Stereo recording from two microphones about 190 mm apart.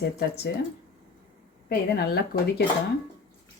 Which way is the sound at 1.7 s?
60° left (ahead or behind).